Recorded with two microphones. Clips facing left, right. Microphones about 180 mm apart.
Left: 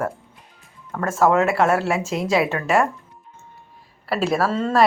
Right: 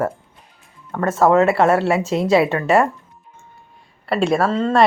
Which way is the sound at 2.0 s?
30° right (ahead or behind).